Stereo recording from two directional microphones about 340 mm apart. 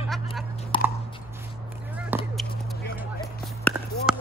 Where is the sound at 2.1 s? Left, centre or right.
Centre.